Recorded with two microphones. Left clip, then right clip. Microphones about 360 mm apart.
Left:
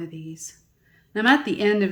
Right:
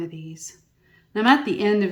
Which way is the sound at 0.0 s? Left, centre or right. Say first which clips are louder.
Right 2 dB; centre.